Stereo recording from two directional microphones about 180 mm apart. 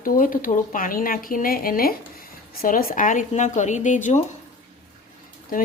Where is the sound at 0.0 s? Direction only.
50° left (ahead or behind).